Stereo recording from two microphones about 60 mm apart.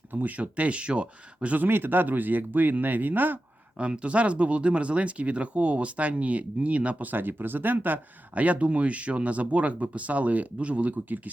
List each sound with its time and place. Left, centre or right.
0.1 s speech: right
3.8 s speech: centre